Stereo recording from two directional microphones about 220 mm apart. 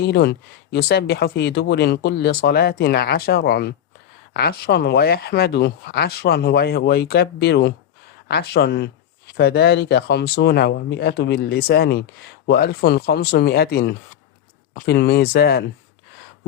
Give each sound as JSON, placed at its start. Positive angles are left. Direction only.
{"t": 0.0, "sound": "speech", "side_deg": 50}